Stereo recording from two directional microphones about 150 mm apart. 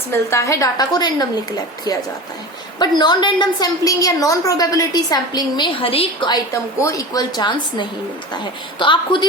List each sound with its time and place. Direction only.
0.3 s a woman's voice: 20° left (ahead or behind)
2.7 s a woman's voice: 30° left (ahead or behind)